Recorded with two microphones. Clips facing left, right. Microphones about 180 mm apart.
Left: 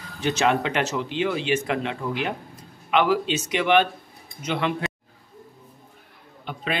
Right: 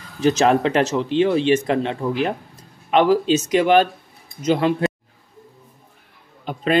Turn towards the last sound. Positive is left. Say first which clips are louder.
# right 9 dB
turn(degrees=-40)  # may be behind; listen again after turning